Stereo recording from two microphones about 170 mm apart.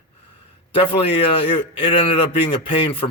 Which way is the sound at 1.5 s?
35° left (ahead or behind).